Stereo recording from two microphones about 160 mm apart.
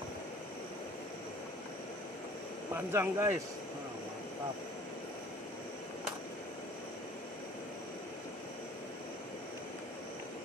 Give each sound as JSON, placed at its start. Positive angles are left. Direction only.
{"t": 2.7, "sound": "speech", "side_deg": -15}